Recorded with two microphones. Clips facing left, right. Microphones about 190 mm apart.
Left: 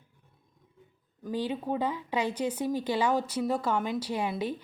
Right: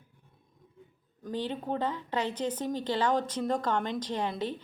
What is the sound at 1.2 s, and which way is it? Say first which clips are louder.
A woman's voice: left 2 dB; 10° left (ahead or behind).